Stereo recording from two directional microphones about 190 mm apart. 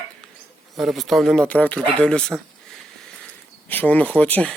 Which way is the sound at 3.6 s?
10° left (ahead or behind).